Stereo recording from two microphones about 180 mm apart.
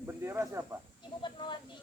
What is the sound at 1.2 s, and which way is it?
Speech, 25° left (ahead or behind).